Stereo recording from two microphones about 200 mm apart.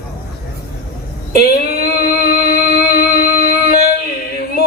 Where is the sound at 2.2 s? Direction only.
50° left (ahead or behind).